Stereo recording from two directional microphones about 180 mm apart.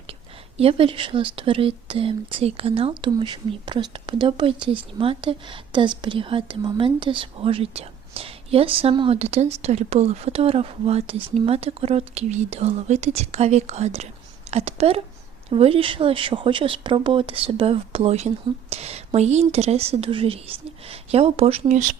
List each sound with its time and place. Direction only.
0.1 s speech: 35° right (ahead or behind)